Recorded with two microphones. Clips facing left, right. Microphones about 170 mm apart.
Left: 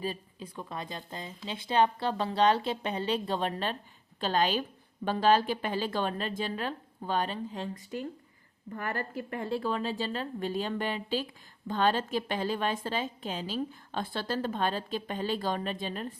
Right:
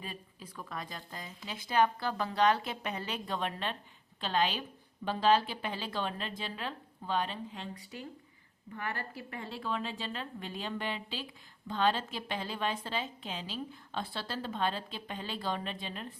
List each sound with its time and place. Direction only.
0.0 s a woman's voice: 30° left (ahead or behind)